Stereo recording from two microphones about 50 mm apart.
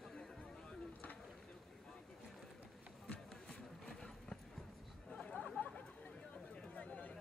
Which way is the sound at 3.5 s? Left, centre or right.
Centre.